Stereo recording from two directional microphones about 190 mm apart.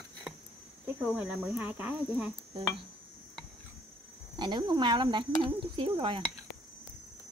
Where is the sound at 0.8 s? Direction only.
5° right (ahead or behind).